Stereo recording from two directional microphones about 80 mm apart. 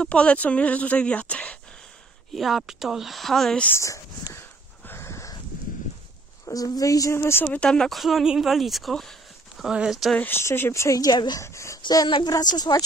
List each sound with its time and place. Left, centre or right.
0.0 s speech: centre
2.3 s a woman's voice: centre
3.7 s speech: left
4.8 s a sound: left
6.4 s speech: left
7.4 s speech: centre
8.0 s a woman's voice: centre
9.6 s a woman's voice: centre
10.1 s speech: left
11.3 s speech: left
12.3 s speech: left